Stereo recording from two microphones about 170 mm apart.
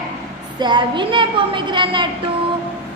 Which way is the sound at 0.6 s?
25° right (ahead or behind).